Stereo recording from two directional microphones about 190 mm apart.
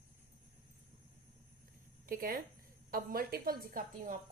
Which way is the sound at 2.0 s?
50° right (ahead or behind).